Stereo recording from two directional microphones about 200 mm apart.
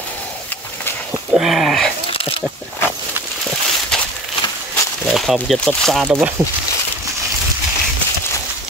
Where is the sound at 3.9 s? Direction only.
5° left (ahead or behind).